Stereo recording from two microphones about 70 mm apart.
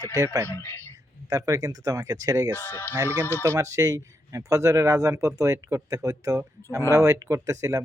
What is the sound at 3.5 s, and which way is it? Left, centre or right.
Speech, right.